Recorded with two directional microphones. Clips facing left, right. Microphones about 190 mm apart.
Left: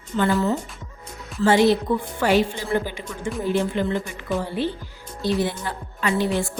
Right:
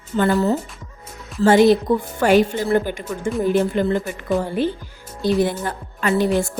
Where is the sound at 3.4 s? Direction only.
45° right (ahead or behind).